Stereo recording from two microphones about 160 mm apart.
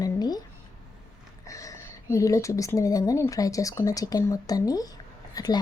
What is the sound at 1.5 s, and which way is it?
A woman's voice, 20° left (ahead or behind).